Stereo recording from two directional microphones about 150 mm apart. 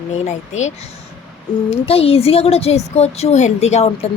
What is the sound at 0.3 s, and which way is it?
Speech, 50° left (ahead or behind).